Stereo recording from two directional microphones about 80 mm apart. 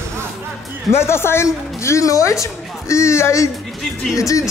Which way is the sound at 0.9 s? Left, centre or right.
Left.